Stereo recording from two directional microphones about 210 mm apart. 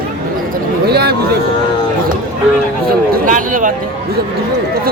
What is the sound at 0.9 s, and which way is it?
Speech, 50° right (ahead or behind).